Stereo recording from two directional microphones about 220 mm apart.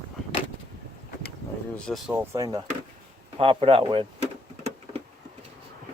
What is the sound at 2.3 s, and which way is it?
A man's voice, 20° right (ahead or behind).